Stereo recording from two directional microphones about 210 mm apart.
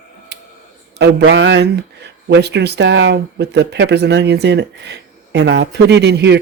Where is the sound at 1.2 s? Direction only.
65° right (ahead or behind).